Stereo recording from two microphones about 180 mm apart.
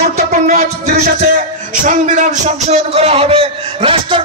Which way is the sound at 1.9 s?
45° right (ahead or behind).